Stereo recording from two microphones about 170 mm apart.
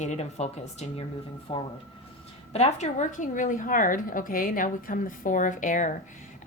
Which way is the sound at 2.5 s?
40° left (ahead or behind).